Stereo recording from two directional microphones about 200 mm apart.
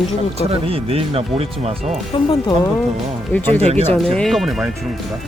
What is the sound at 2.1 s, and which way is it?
Speech, 25° left (ahead or behind).